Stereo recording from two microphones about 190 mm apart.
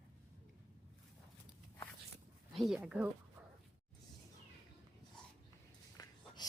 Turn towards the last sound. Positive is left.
turn(degrees=20)  # may be behind; listen again after turning